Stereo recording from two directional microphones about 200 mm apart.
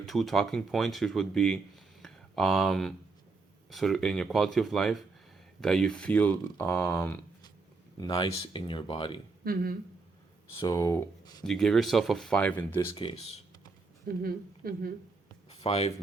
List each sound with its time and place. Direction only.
0.0 s speech: centre (ahead or behind)
7.9 s speech: 20° left (ahead or behind)
9.4 s speech: 45° right (ahead or behind)
10.6 s speech: 15° left (ahead or behind)
11.4 s speech: centre (ahead or behind)
12.9 s speech: 25° left (ahead or behind)
14.2 s a woman's voice: 45° right (ahead or behind)
15.4 s a sound: 30° left (ahead or behind)